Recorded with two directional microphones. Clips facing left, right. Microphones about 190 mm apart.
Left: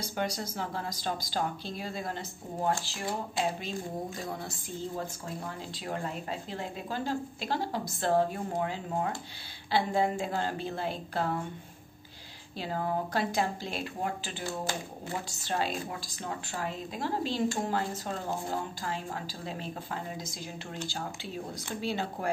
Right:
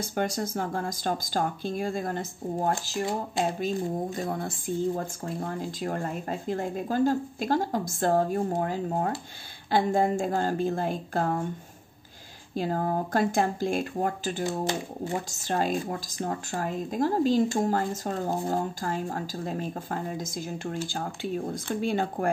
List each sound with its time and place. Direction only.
0.0 s speech: 50° right (ahead or behind)
4.3 s speech: 50° right (ahead or behind)
12.5 s speech: 45° right (ahead or behind)
14.4 s speech: 20° right (ahead or behind)
15.3 s speech: 45° right (ahead or behind)